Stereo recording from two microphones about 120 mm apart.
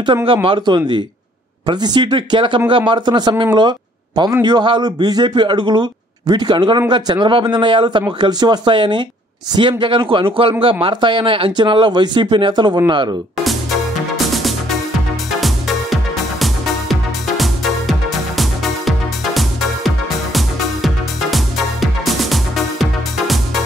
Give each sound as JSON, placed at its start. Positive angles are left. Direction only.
{"t": 0.3, "sound": "a man's voice", "side_deg": -45}
{"t": 3.5, "sound": "a sound", "side_deg": -40}
{"t": 4.4, "sound": "a man's voice", "side_deg": -35}
{"t": 13.4, "sound": "music", "side_deg": 0}